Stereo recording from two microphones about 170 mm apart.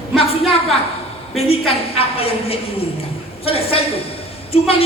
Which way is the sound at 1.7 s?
35° left (ahead or behind).